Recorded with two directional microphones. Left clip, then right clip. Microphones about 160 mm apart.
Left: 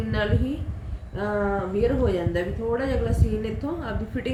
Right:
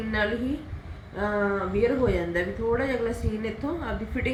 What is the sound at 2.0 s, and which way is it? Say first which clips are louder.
A woman's voice: left 1 dB; 10° right (ahead or behind).